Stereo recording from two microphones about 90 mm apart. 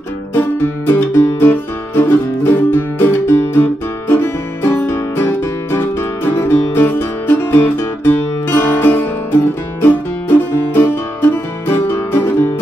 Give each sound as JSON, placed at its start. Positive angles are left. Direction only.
{"t": 0.3, "sound": "music", "side_deg": 25}